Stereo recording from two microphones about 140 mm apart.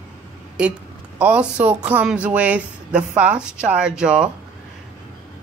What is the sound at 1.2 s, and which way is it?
Speech, 10° right (ahead or behind).